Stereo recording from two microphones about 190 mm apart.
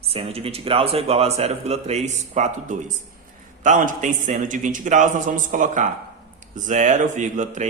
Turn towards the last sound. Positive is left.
turn(degrees=-40)  # may be behind; listen again after turning